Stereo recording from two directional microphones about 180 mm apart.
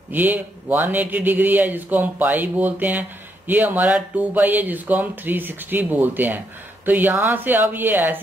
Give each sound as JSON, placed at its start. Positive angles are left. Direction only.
{"t": 0.1, "sound": "speech", "side_deg": -10}